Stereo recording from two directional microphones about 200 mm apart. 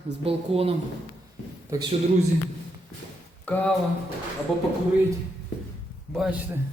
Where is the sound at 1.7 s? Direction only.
15° right (ahead or behind).